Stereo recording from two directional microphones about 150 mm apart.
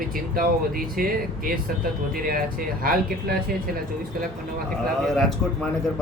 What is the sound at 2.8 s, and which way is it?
Speech, 75° right (ahead or behind).